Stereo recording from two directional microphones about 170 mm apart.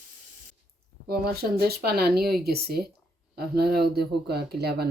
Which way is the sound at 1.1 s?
65° right (ahead or behind).